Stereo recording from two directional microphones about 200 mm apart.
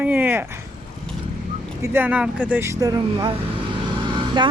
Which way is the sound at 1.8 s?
10° right (ahead or behind).